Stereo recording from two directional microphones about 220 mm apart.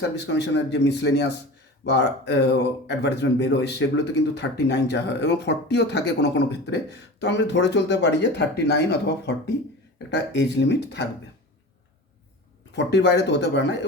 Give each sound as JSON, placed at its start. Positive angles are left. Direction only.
{"t": 0.3, "sound": "speech", "side_deg": 50}
{"t": 12.7, "sound": "speech", "side_deg": 50}